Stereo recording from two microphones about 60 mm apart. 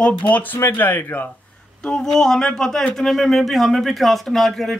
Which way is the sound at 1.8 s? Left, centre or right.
Centre.